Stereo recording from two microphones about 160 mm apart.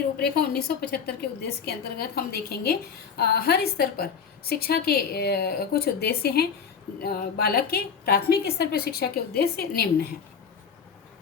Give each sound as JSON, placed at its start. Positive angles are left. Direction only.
{"t": 0.2, "sound": "a woman's voice", "side_deg": 85}